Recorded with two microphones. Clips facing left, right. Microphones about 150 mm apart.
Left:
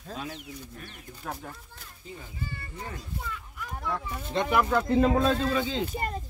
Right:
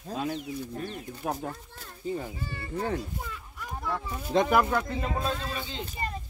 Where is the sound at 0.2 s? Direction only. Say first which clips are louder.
Right 11 dB; 30° right (ahead or behind).